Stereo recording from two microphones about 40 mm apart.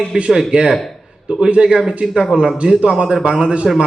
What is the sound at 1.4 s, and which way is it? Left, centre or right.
A man's voice, right.